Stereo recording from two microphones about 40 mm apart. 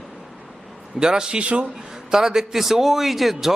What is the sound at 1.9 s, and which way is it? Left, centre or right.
A man's voice, centre.